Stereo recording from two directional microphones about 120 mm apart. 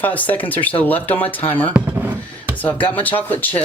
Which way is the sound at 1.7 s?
15° right (ahead or behind).